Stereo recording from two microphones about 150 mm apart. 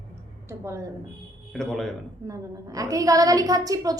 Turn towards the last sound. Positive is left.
turn(degrees=-25)  # may be behind; listen again after turning